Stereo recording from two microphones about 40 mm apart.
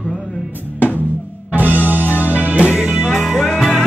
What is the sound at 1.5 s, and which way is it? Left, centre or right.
Music, right.